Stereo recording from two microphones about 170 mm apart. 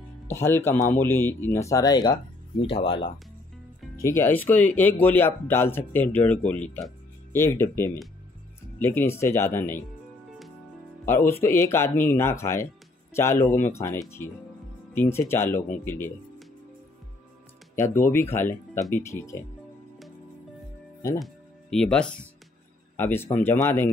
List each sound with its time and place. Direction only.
0.3 s speech: 15° left (ahead or behind); by 3.1 s 30° left (ahead or behind)
3.9 s speech: 15° left (ahead or behind)
11.1 s speech: 15° left (ahead or behind)
17.7 s speech: 15° left (ahead or behind)
21.2 s speech: 5° left (ahead or behind)